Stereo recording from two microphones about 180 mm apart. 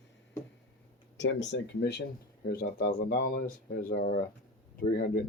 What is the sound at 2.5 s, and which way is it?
Speech, 60° left (ahead or behind).